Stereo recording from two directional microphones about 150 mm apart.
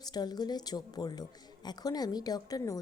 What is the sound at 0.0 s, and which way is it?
Speech, 25° left (ahead or behind).